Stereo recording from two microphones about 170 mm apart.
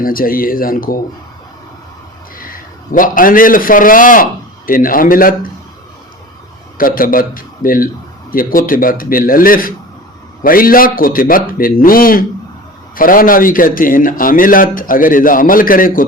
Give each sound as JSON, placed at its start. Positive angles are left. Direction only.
{"t": 0.0, "sound": "speech", "side_deg": 55}
{"t": 2.4, "sound": "a man's voice", "side_deg": 55}
{"t": 6.7, "sound": "speech", "side_deg": 55}